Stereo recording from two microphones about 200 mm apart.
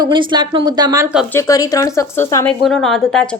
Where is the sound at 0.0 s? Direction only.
25° right (ahead or behind).